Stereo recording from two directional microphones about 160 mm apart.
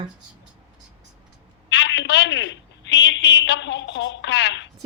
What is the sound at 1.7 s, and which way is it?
Telephone, 90° left.